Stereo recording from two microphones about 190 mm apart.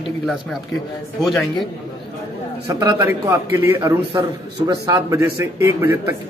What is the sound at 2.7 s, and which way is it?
Speech, 20° right (ahead or behind).